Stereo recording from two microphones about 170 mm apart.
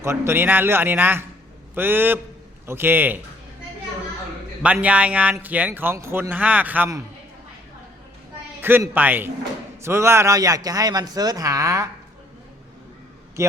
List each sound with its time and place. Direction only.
0.0 s speech: 15° right (ahead or behind)
4.6 s speech: 10° right (ahead or behind)
8.6 s speech: 10° right (ahead or behind)
13.4 s speech: 15° right (ahead or behind)